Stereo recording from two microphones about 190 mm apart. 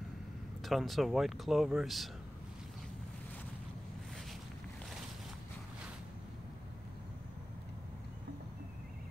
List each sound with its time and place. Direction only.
0.6 s speech: centre (ahead or behind)